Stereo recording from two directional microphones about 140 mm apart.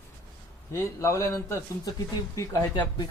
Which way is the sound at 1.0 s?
20° left (ahead or behind).